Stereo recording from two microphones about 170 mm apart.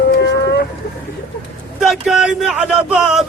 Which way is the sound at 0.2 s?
85° left.